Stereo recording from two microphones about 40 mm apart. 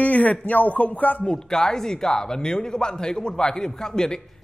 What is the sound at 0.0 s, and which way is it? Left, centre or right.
Speech, left.